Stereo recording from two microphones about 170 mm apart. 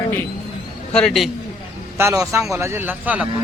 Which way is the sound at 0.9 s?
5° left (ahead or behind).